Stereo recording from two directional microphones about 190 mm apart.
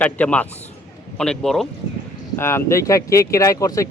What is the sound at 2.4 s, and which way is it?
Speech, 15° left (ahead or behind).